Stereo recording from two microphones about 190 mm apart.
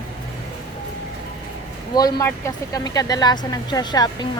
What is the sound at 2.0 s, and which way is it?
Speech, 20° left (ahead or behind).